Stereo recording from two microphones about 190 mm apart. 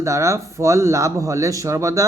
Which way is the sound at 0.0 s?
15° right (ahead or behind).